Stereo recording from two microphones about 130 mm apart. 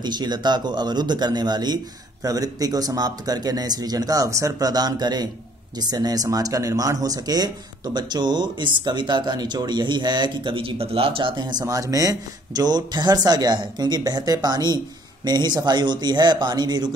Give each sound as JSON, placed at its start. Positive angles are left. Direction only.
{"t": 0.0, "sound": "speech", "side_deg": -35}